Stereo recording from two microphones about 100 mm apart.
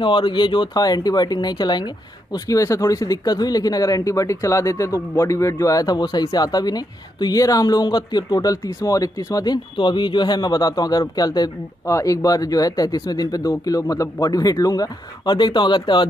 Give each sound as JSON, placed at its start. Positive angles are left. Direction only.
{"t": 0.0, "sound": "speech", "side_deg": 55}
{"t": 2.3, "sound": "speech", "side_deg": 35}